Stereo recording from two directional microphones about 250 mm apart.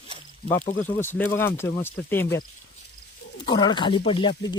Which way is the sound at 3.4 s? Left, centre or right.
Centre.